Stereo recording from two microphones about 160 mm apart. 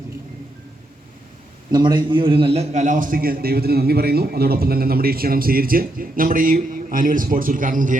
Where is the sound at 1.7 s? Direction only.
25° right (ahead or behind).